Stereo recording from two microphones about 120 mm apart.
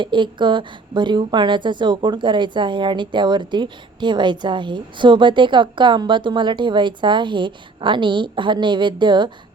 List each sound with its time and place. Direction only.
0.0 s speech: 40° right (ahead or behind)